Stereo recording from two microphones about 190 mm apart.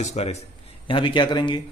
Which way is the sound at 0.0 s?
35° left (ahead or behind).